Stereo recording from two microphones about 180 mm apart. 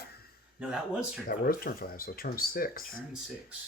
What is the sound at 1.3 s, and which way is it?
Speech, 55° left (ahead or behind).